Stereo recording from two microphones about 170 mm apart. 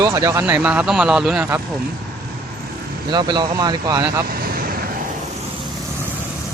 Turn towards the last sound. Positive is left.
turn(degrees=-60)  # may be behind; listen again after turning